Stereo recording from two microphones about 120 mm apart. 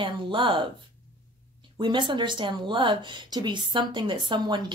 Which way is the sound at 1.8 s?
40° right (ahead or behind).